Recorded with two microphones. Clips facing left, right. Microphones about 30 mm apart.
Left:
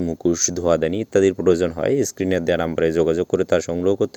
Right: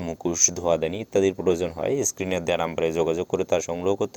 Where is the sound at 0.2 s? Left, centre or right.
Left.